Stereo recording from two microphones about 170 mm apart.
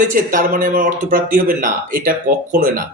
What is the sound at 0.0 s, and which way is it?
Speech, 50° right (ahead or behind).